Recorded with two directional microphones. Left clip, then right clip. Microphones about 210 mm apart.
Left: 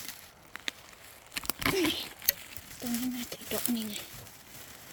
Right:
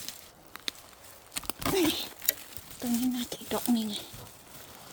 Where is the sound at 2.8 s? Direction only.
25° right (ahead or behind).